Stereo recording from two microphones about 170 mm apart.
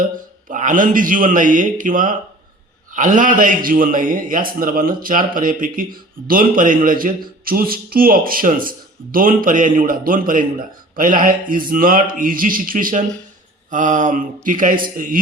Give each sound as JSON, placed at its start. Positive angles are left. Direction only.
{"t": 0.0, "sound": "a man's voice", "side_deg": -50}